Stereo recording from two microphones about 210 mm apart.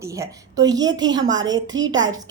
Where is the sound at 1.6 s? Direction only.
65° right (ahead or behind).